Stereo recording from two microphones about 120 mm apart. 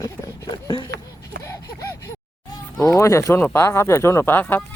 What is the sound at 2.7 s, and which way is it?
Speech, 25° left (ahead or behind).